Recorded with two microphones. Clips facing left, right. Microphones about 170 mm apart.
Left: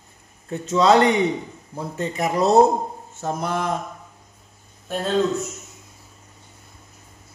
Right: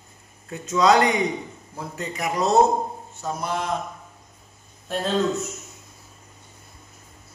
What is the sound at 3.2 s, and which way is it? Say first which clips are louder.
Speech: left 3 dB; 55° left (ahead or behind).